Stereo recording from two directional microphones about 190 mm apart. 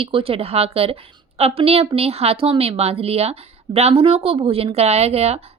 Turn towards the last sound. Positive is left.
turn(degrees=-35)  # may be behind; listen again after turning